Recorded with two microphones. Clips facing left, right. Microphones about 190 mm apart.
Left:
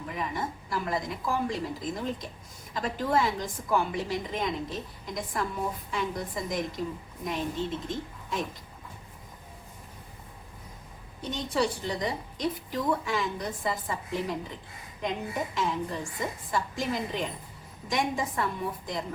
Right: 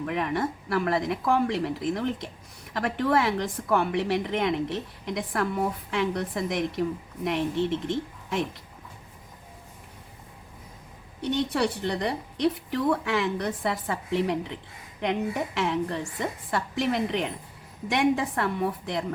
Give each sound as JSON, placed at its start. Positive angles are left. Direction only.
{"t": 0.0, "sound": "a woman's voice", "side_deg": -70}
{"t": 11.2, "sound": "a woman's voice", "side_deg": -65}